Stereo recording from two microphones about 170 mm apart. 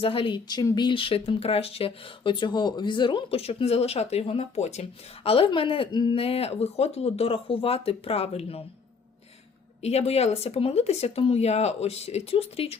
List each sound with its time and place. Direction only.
0.0 s speech: 30° left (ahead or behind)
9.8 s speech: 40° left (ahead or behind)